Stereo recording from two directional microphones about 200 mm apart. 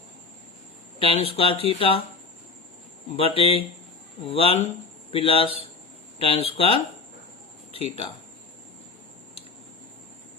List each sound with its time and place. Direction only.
0.9 s speech: 30° left (ahead or behind)
3.2 s speech: 30° left (ahead or behind)